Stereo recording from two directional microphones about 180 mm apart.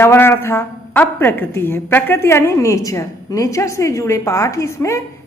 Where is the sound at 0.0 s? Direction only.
15° left (ahead or behind).